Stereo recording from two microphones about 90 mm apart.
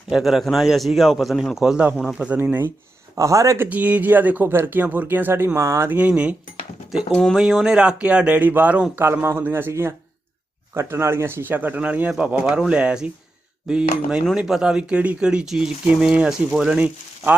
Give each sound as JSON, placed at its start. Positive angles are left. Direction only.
{"t": 0.1, "sound": "a man's voice", "side_deg": -5}
{"t": 2.4, "sound": "speech", "side_deg": -25}
{"t": 3.2, "sound": "speech", "side_deg": -35}
{"t": 3.7, "sound": "speech", "side_deg": -20}
{"t": 6.0, "sound": "a man's voice", "side_deg": -10}
{"t": 9.2, "sound": "speech", "side_deg": -25}